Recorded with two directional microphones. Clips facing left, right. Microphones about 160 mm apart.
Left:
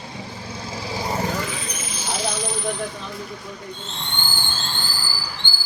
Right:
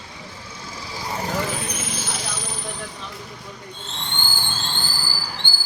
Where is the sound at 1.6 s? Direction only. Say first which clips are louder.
Right 2 dB; 65° right (ahead or behind).